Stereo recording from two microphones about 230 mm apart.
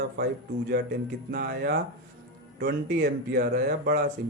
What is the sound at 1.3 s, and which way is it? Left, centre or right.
Speech, right.